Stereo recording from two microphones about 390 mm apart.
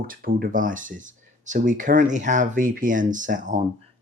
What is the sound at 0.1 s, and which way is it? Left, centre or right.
Speech, right.